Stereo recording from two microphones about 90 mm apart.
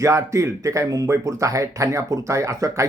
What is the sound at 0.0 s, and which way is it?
Speech, 35° right (ahead or behind).